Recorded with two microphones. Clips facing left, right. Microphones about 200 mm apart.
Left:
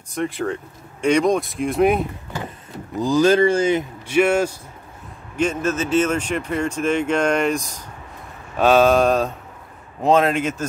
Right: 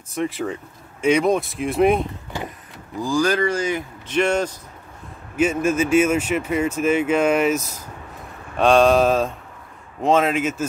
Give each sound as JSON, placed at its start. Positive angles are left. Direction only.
{"t": 0.1, "sound": "speech", "side_deg": 0}
{"t": 3.0, "sound": "speech", "side_deg": 20}
{"t": 4.1, "sound": "a man's voice", "side_deg": 5}
{"t": 5.3, "sound": "speech", "side_deg": -10}